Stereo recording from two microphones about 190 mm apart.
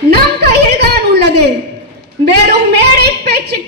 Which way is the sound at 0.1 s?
60° right (ahead or behind).